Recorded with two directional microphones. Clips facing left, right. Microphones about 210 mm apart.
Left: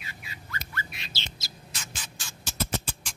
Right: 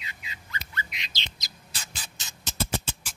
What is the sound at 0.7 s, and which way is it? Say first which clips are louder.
Bird: even; 15° right (ahead or behind).